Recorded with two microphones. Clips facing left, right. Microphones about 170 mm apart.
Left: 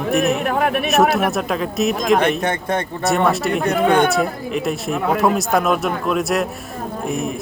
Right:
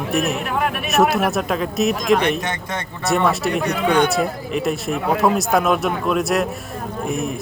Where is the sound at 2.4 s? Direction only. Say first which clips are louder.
Left 6 dB; 55° left (ahead or behind).